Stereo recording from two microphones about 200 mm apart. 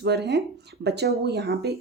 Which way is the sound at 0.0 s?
55° right (ahead or behind).